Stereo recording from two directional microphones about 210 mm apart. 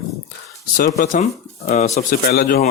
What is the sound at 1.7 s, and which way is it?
Speech, 30° left (ahead or behind).